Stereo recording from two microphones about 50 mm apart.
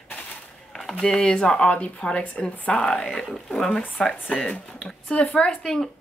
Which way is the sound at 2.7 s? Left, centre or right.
Centre.